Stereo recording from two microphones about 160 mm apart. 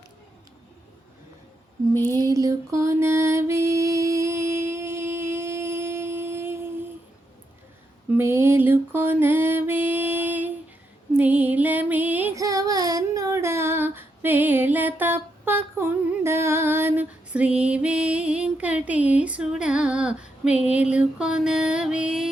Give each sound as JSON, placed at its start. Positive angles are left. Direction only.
{"t": 2.1, "sound": "music", "side_deg": -20}
{"t": 8.1, "sound": "mantra", "side_deg": -15}
{"t": 11.2, "sound": "music", "side_deg": -10}
{"t": 12.4, "sound": "child singing", "side_deg": -20}